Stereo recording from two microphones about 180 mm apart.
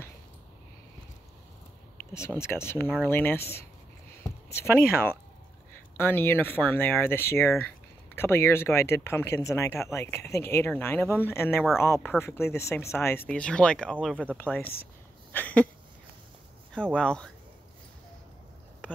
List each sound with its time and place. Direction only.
2.1 s speech: 15° left (ahead or behind)
15.3 s a sound: 10° left (ahead or behind)
16.7 s speech: 5° left (ahead or behind)